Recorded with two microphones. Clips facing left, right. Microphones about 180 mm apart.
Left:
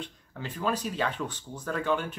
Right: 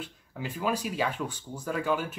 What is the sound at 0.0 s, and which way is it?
Speech, 10° right (ahead or behind).